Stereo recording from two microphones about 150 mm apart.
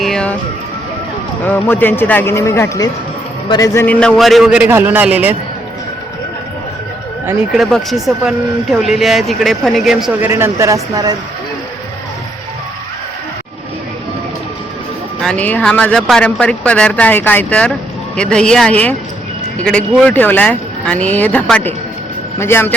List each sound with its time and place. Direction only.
0.0 s music: 5° left (ahead or behind)
1.5 s speech: 10° left (ahead or behind)
3.5 s music: 25° left (ahead or behind)
3.8 s a man's voice: 5° left (ahead or behind)
7.5 s speech: centre (ahead or behind); by 11.2 s 25° right (ahead or behind)
15.2 s speech: 5° left (ahead or behind)
20.0 s speech: 10° left (ahead or behind)